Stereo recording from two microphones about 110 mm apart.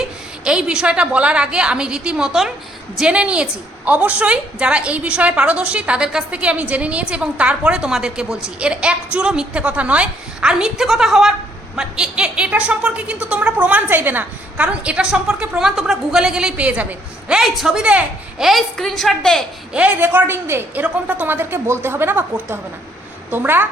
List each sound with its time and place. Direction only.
0.0 s a woman's voice: 10° right (ahead or behind)
19.7 s a woman's voice: 15° right (ahead or behind)